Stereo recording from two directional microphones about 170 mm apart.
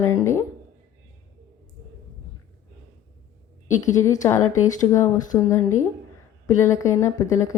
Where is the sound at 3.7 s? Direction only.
45° left (ahead or behind).